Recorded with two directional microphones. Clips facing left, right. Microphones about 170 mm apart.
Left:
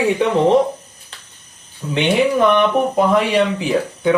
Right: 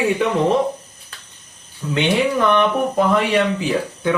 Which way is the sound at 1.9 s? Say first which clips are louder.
Left 2 dB; 20° left (ahead or behind).